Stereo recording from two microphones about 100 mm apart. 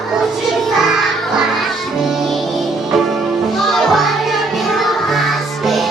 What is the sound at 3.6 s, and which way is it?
Music, centre (ahead or behind).